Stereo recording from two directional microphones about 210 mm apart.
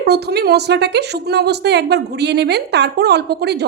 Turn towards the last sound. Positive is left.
turn(degrees=-50)  # may be behind; listen again after turning